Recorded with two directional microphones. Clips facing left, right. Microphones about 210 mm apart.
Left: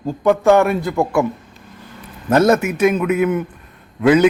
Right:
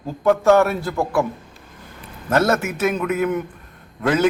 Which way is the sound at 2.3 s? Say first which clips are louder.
Left 5 dB; 15° left (ahead or behind).